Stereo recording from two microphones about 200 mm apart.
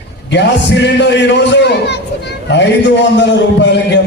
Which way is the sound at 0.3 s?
60° left (ahead or behind).